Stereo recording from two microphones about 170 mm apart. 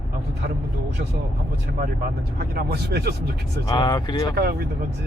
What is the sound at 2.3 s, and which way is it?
Speech, 65° right (ahead or behind).